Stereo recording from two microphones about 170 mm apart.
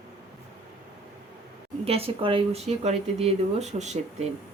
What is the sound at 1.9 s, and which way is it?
Speech, 35° right (ahead or behind).